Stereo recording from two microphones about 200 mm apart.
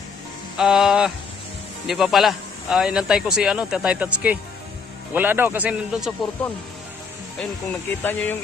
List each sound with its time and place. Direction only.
0.5 s speech: 5° right (ahead or behind)
7.7 s speech: 10° left (ahead or behind)